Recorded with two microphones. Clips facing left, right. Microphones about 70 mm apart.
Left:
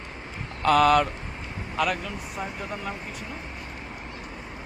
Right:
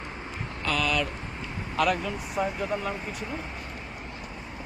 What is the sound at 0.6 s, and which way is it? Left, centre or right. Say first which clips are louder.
Speech: left 9 dB; left.